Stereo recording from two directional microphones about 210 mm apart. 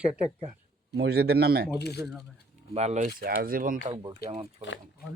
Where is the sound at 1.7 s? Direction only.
50° left (ahead or behind).